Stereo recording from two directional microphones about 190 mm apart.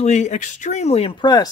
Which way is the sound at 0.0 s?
35° left (ahead or behind).